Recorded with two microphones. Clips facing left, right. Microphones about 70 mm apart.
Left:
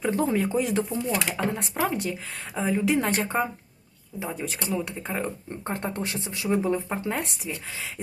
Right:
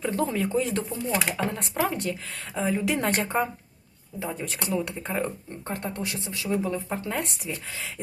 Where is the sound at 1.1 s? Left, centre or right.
Centre.